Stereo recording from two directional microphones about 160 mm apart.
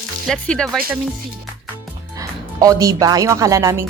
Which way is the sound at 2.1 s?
20° right (ahead or behind).